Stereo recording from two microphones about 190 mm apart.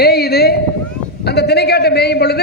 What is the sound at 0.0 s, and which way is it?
Run, 55° left (ahead or behind).